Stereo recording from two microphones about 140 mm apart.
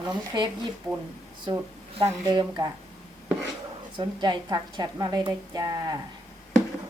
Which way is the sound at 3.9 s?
30° right (ahead or behind).